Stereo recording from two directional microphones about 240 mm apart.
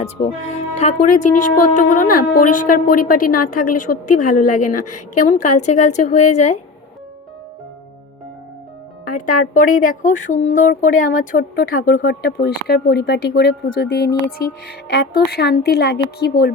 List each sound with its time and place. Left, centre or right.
0.0 s a woman's voice: left
9.0 s speech: left